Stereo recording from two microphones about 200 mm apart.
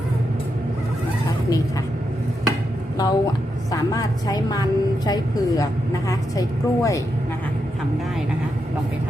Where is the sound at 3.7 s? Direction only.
15° left (ahead or behind).